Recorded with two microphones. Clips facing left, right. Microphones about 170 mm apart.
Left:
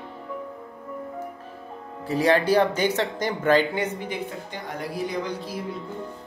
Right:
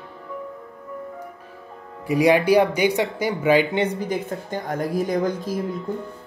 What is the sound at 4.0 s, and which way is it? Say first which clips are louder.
A woman's voice: right 5 dB; 45° right (ahead or behind).